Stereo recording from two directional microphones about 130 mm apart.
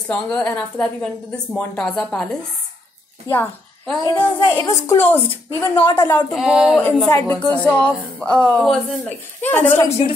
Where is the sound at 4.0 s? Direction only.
35° left (ahead or behind).